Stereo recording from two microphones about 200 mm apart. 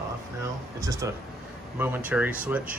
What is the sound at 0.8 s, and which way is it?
Speech, 15° right (ahead or behind).